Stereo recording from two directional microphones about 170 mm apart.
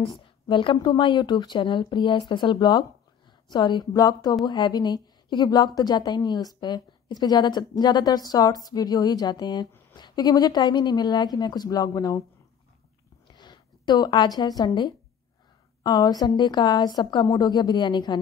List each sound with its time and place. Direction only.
0.0 s a woman's voice: 30° left (ahead or behind)
13.3 s a woman's voice: 25° left (ahead or behind)